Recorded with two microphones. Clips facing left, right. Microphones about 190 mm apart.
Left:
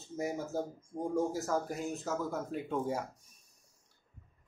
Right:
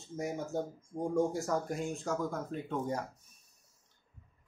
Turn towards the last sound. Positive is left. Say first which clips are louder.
# left 1 dB
turn(degrees=10)  # may be behind; listen again after turning